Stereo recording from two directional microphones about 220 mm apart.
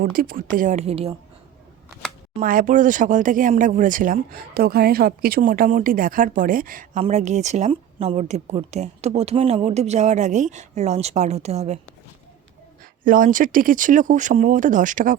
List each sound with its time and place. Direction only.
0.0 s speech: 40° right (ahead or behind)
2.3 s speech: 40° right (ahead or behind)
13.1 s speech: 40° right (ahead or behind)